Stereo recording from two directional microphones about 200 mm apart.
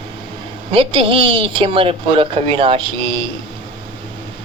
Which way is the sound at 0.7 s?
25° right (ahead or behind).